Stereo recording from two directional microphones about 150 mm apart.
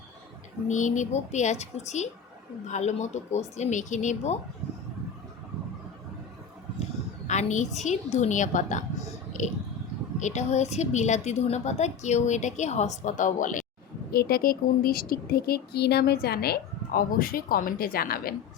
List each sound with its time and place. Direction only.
0.7 s a woman's voice: 55° left (ahead or behind)
7.3 s a woman's voice: 50° left (ahead or behind)
14.1 s a woman's voice: 90° left